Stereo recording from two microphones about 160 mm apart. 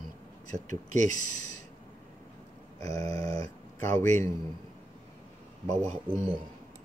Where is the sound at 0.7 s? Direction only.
50° right (ahead or behind).